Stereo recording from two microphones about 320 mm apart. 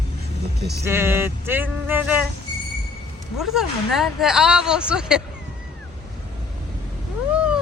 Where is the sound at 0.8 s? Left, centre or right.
Centre.